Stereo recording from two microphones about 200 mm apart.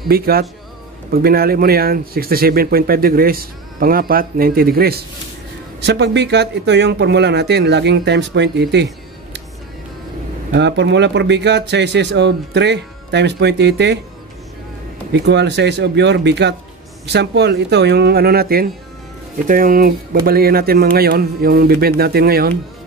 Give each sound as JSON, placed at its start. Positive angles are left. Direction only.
{"t": 0.1, "sound": "speech", "side_deg": -50}
{"t": 10.5, "sound": "speech", "side_deg": -60}
{"t": 15.1, "sound": "speech", "side_deg": -60}